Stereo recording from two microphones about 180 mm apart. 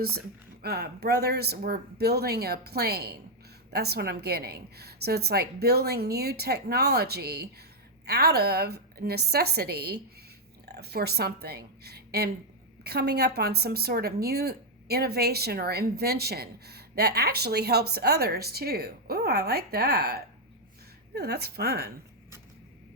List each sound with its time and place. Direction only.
0.6 s a woman's voice: 60° right (ahead or behind)